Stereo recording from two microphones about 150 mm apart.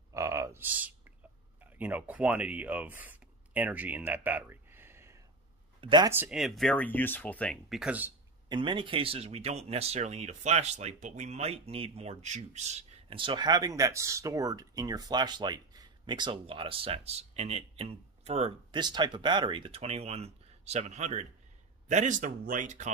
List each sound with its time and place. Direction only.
0.1 s a sound: 20° right (ahead or behind)
1.8 s speech: 10° right (ahead or behind)
5.8 s speech: 30° right (ahead or behind)
6.0 s speech: 15° right (ahead or behind)
6.3 s speech: centre (ahead or behind)
7.7 s speech: 10° right (ahead or behind)
8.5 s speech: 35° right (ahead or behind)
18.8 s speech: 30° right (ahead or behind); by 22.8 s 55° right (ahead or behind)